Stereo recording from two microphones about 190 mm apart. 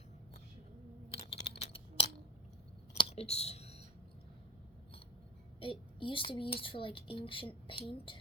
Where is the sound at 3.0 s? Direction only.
30° left (ahead or behind).